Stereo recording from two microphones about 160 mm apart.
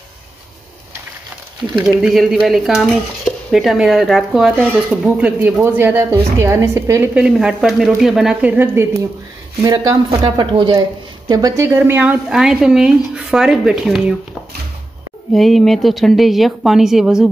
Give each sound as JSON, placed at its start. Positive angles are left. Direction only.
{"t": 1.8, "sound": "a woman's voice", "side_deg": -5}
{"t": 7.2, "sound": "a woman's voice", "side_deg": -5}
{"t": 15.3, "sound": "a woman's voice", "side_deg": 0}